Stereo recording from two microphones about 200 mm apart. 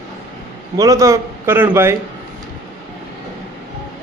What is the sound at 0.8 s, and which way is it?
A man's voice, 15° right (ahead or behind).